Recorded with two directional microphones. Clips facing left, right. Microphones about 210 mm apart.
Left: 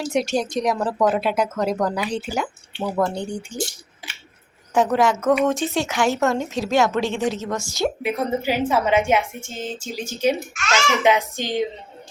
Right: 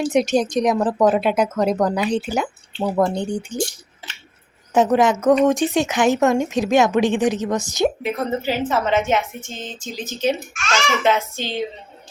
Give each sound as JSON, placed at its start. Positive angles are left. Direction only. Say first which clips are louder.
{"t": 0.1, "sound": "a woman's voice", "louder": "right 2 dB", "side_deg": -20}
{"t": 4.7, "sound": "a woman's voice", "louder": "right 3 dB", "side_deg": -20}
{"t": 8.0, "sound": "a woman's voice", "louder": "even", "side_deg": 10}